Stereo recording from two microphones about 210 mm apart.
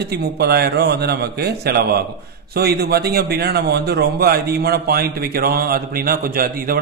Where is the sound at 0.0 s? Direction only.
50° right (ahead or behind).